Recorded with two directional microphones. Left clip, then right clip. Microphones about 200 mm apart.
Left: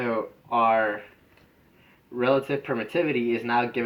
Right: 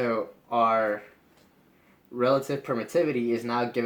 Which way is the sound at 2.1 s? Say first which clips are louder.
Left 1 dB; 25° right (ahead or behind).